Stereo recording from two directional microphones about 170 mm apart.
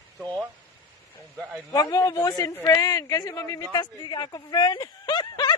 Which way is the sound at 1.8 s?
20° left (ahead or behind).